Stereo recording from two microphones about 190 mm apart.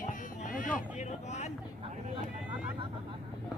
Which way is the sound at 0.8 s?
35° left (ahead or behind).